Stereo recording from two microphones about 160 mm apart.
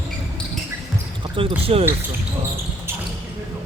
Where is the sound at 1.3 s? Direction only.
35° right (ahead or behind).